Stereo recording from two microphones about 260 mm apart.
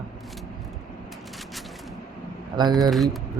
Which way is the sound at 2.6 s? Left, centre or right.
Centre.